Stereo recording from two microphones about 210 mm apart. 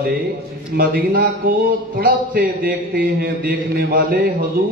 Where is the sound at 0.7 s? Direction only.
45° right (ahead or behind).